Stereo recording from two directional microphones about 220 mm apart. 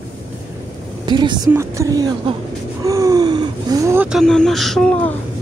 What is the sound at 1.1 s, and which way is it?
A woman's voice, 20° right (ahead or behind).